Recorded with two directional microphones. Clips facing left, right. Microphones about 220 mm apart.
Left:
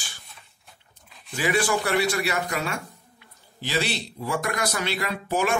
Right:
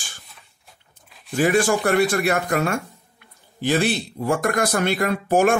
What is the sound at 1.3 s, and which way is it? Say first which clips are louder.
Speech: right 6 dB; 50° right (ahead or behind).